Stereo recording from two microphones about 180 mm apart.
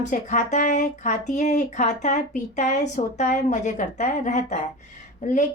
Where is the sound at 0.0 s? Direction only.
45° left (ahead or behind).